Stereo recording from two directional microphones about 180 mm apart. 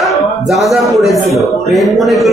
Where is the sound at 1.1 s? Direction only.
15° left (ahead or behind).